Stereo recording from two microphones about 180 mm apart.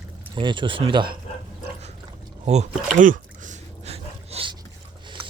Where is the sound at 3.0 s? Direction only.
45° right (ahead or behind).